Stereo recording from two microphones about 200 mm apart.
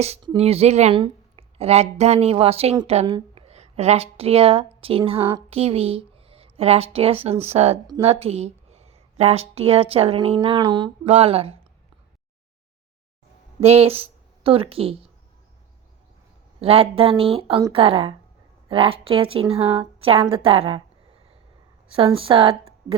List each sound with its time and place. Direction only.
0.0 s speech: 30° right (ahead or behind)
13.6 s speech: 30° right (ahead or behind)
16.6 s speech: 30° right (ahead or behind)
21.9 s speech: 25° right (ahead or behind)